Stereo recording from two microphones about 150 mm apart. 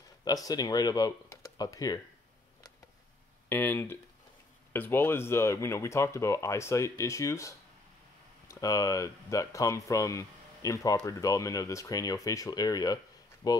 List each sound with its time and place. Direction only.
0.2 s speech: 25° left (ahead or behind)
3.4 s speech: 15° left (ahead or behind)